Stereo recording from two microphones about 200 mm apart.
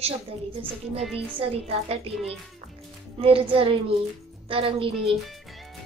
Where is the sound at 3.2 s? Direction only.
25° right (ahead or behind).